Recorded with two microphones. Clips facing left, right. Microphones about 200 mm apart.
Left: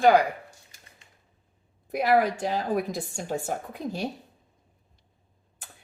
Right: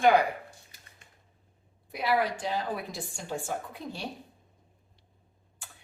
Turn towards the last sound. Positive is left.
turn(degrees=40)  # may be behind; listen again after turning